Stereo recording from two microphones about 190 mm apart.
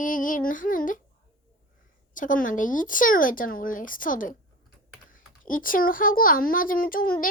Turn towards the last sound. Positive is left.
turn(degrees=50)  # may be behind; listen again after turning